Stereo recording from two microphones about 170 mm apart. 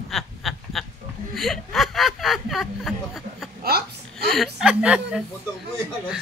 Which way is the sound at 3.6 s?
65° right (ahead or behind).